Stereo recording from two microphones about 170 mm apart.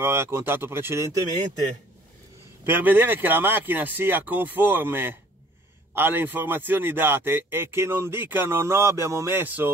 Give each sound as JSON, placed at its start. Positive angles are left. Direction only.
{"t": 0.0, "sound": "a man's voice", "side_deg": -15}
{"t": 2.6, "sound": "a man's voice", "side_deg": -10}